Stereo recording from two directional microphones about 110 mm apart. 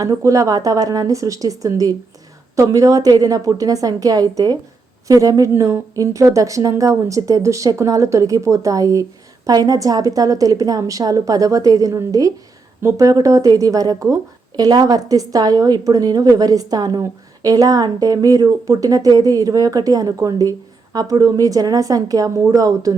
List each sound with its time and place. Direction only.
0.0 s a woman's voice: 30° right (ahead or behind)